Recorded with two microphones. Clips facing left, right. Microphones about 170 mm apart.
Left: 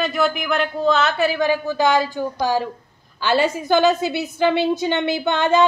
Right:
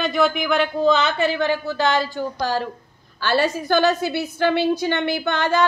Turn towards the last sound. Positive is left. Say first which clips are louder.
# left 3 dB
turn(degrees=20)  # may be behind; listen again after turning